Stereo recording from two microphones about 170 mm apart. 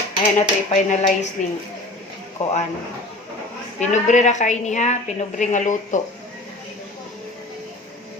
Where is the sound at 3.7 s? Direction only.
45° left (ahead or behind).